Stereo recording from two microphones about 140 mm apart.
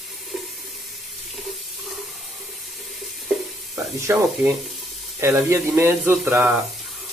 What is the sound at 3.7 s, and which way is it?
Speech, 20° right (ahead or behind).